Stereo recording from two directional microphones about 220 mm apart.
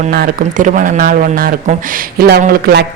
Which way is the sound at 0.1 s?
40° right (ahead or behind).